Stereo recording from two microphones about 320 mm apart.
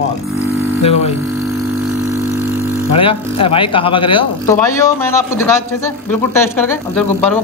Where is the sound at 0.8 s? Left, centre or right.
Centre.